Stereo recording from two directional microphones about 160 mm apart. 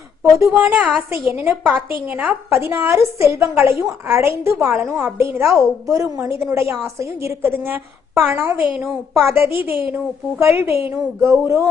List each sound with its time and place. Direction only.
0.2 s a woman's voice: 15° right (ahead or behind)